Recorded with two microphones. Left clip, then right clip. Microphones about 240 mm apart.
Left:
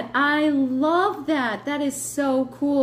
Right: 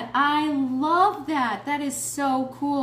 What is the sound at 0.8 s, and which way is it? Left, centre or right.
Speech, right.